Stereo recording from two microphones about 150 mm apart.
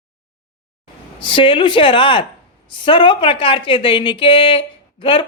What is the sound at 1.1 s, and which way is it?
Speech, 35° left (ahead or behind).